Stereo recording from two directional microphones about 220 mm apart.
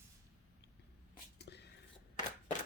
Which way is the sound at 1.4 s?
50° left (ahead or behind).